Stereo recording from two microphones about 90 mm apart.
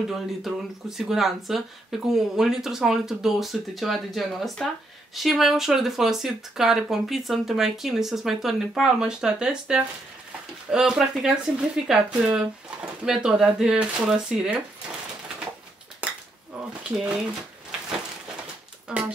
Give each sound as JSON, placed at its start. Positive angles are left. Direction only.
{"t": 0.0, "sound": "speech", "side_deg": -5}
{"t": 16.0, "sound": "cutlery", "side_deg": -15}
{"t": 18.9, "sound": "speech", "side_deg": -10}